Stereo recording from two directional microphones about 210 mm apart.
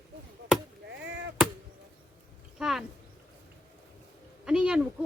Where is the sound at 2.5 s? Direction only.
Centre (ahead or behind).